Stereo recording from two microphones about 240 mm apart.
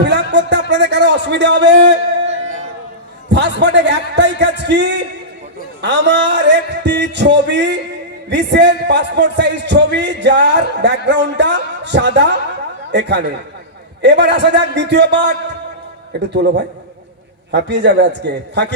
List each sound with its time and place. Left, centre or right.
0.0 s music: right
2.2 s a sound: right
3.2 s a man's voice: right
17.5 s a man's voice: right